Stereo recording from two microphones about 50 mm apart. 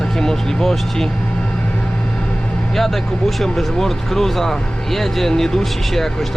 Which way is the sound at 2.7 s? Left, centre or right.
Centre.